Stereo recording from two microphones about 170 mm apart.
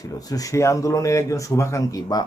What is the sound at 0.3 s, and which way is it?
Speech, 20° left (ahead or behind).